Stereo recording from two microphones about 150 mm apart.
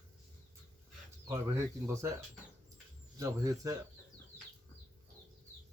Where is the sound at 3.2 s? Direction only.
20° right (ahead or behind).